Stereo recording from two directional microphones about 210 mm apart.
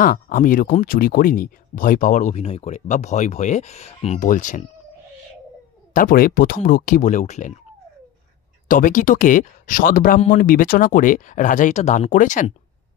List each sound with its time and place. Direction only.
0.0 s speech: 40° left (ahead or behind)
5.9 s speech: 45° left (ahead or behind)
8.6 s speech: 40° left (ahead or behind)